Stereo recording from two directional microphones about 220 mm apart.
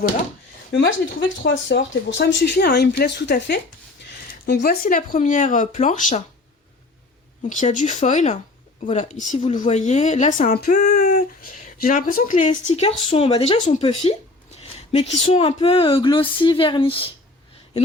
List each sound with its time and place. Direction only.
0.7 s speech: 55° left (ahead or behind); by 6.2 s 35° left (ahead or behind)
7.4 s speech: 35° left (ahead or behind)